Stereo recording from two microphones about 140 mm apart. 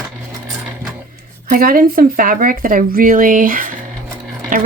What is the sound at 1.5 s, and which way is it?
Speech, 90° right.